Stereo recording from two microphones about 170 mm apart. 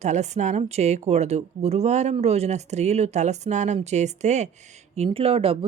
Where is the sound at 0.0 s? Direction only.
45° right (ahead or behind).